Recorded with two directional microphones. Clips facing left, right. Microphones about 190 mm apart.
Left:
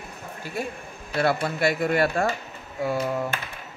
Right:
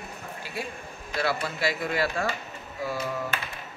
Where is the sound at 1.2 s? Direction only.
55° left (ahead or behind).